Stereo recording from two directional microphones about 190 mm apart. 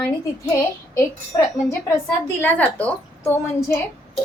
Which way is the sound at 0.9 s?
15° left (ahead or behind).